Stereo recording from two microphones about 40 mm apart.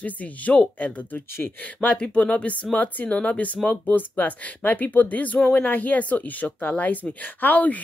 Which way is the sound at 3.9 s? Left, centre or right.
Left.